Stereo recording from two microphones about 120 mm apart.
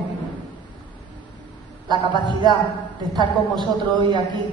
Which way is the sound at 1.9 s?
40° right (ahead or behind).